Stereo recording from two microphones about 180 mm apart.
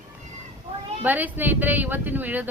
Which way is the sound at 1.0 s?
10° right (ahead or behind).